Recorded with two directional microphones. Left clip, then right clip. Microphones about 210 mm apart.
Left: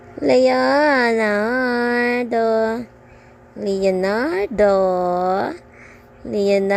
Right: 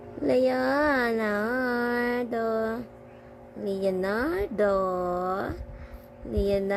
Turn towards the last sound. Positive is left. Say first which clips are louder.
# left 9 dB
turn(degrees=25)  # may be behind; listen again after turning